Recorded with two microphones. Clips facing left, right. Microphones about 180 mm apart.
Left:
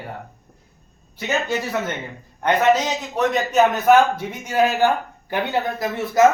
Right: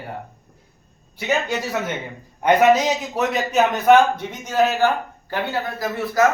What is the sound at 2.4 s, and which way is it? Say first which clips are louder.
A man's voice: right 2 dB; 10° right (ahead or behind).